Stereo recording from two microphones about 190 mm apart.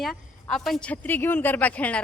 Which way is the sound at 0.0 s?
Centre (ahead or behind).